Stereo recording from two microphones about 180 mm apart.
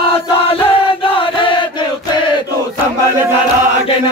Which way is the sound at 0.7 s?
30° left (ahead or behind).